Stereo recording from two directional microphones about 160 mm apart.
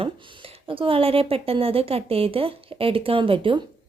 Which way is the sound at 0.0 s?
35° right (ahead or behind).